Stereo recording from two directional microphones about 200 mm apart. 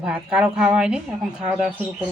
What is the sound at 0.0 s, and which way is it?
Speech, 5° right (ahead or behind).